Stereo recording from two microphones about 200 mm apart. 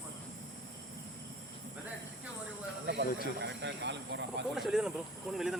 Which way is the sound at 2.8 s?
60° right (ahead or behind).